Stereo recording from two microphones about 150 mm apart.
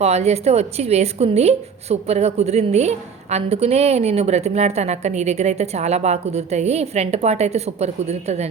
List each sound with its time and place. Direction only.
0.0 s a woman's voice: 45° right (ahead or behind)